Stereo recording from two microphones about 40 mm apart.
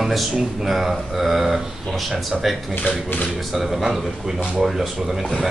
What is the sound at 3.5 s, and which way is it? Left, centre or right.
A man's voice, centre.